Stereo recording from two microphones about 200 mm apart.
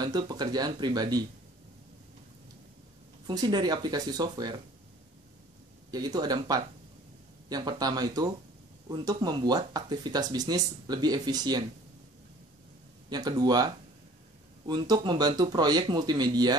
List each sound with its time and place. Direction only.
0.0 s speech: 20° right (ahead or behind)
3.3 s speech: 20° right (ahead or behind)
5.9 s speech: 20° right (ahead or behind)
13.1 s speech: 20° right (ahead or behind)
14.7 s speech: 20° right (ahead or behind)